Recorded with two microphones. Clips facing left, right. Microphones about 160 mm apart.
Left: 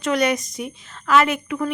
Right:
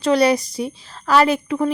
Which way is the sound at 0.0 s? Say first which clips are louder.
Right 5 dB; 35° right (ahead or behind).